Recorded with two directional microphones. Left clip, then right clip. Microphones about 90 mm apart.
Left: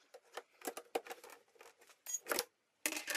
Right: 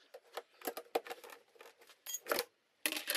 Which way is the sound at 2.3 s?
5° right (ahead or behind).